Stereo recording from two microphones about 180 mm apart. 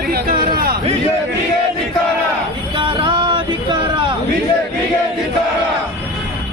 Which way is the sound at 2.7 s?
25° right (ahead or behind).